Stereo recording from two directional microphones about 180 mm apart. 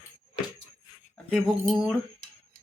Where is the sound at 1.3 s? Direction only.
Centre (ahead or behind).